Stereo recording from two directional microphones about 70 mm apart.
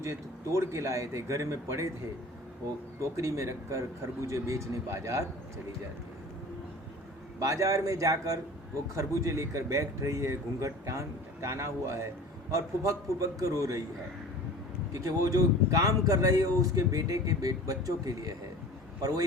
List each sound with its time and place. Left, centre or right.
0.0 s speech: right
3.0 s speech: right
7.3 s speech: right
14.9 s speech: right